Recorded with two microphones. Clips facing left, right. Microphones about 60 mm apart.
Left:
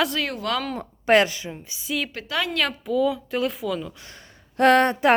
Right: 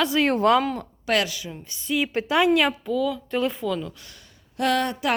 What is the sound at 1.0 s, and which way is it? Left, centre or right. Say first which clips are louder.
Speech: left 6 dB; left.